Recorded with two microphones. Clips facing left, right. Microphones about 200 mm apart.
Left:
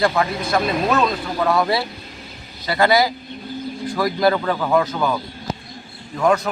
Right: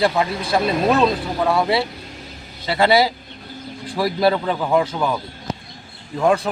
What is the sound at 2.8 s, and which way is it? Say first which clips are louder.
Speech: right 1 dB; 30° right (ahead or behind).